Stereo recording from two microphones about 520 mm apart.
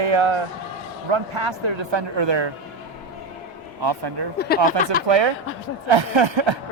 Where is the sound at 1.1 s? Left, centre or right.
Right.